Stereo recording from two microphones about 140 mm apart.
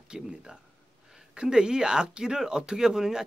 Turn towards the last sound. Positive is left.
turn(degrees=-5)  # may be behind; listen again after turning